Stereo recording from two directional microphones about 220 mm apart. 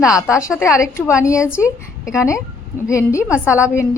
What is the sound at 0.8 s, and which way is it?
Speech, 15° left (ahead or behind).